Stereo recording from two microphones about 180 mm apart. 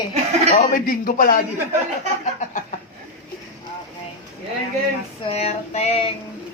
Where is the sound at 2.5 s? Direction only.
45° left (ahead or behind).